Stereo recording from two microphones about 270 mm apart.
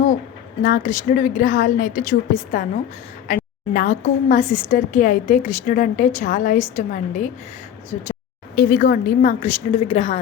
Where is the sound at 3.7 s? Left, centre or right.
Left.